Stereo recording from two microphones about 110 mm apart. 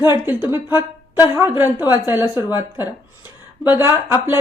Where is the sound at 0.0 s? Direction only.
20° right (ahead or behind).